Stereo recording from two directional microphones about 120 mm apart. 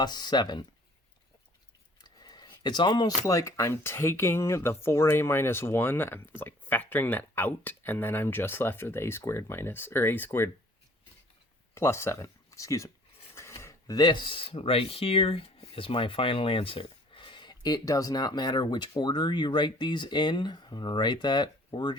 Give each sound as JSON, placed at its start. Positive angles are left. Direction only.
{"t": 0.0, "sound": "speech", "side_deg": 35}
{"t": 2.0, "sound": "a sound", "side_deg": 35}
{"t": 3.2, "sound": "speech", "side_deg": 25}
{"t": 11.7, "sound": "speech", "side_deg": 20}